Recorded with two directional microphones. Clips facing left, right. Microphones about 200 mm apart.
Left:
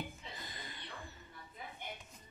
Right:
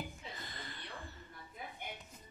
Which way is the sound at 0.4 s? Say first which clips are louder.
Right 1 dB; 15° left (ahead or behind).